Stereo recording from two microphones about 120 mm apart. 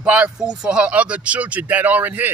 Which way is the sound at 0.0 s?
10° right (ahead or behind).